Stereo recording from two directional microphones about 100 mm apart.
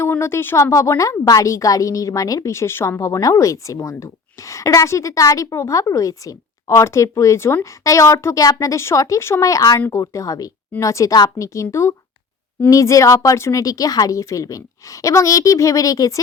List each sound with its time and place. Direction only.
0.0 s a woman's voice: 25° left (ahead or behind)